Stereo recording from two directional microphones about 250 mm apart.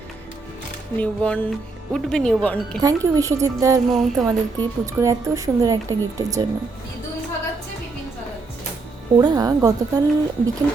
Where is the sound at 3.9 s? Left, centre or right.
Centre.